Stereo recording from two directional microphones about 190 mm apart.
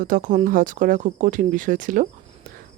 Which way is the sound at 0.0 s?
45° right (ahead or behind).